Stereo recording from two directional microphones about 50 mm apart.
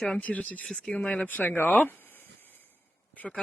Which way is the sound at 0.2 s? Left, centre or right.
Left.